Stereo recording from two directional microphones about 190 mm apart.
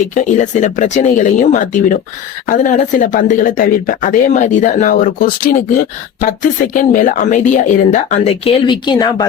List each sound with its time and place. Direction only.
0.1 s speech: 40° left (ahead or behind); by 9.2 s 20° left (ahead or behind)